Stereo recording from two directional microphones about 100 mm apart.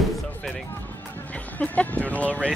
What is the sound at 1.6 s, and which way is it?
Speech, 15° left (ahead or behind).